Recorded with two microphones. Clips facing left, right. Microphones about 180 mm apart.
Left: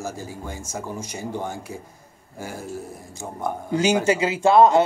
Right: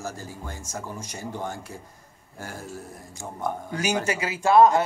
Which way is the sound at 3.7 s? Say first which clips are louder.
Left 9 dB; 25° left (ahead or behind).